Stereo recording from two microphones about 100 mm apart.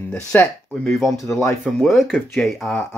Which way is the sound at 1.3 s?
30° left (ahead or behind).